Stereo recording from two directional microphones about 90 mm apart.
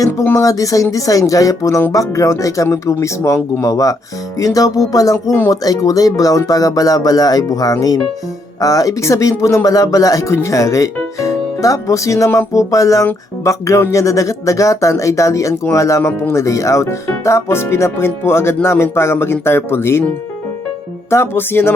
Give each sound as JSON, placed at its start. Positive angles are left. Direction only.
{"t": 0.3, "sound": "speech", "side_deg": 40}
{"t": 21.1, "sound": "speech", "side_deg": 30}